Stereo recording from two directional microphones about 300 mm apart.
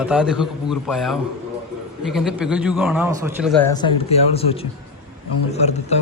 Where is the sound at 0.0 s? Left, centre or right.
Centre.